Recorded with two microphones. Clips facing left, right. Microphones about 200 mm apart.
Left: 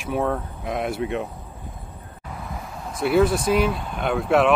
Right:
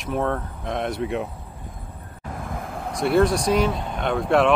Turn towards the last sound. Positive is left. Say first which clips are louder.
# even
turn(degrees=5)  # may be behind; listen again after turning